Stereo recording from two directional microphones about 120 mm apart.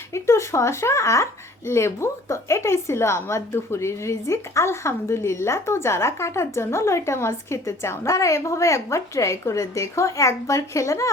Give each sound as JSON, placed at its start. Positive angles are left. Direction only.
{"t": 0.1, "sound": "speech", "side_deg": 25}